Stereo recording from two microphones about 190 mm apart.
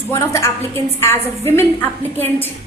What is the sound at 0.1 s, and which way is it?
A woman's voice, 15° left (ahead or behind).